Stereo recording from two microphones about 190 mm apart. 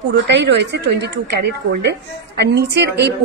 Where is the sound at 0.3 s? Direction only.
65° right (ahead or behind).